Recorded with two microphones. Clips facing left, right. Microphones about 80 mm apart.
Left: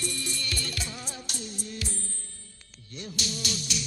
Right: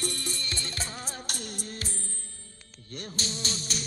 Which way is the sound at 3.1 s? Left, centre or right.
Right.